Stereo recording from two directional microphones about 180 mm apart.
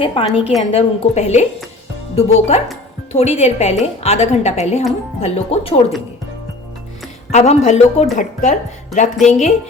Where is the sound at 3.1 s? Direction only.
35° left (ahead or behind).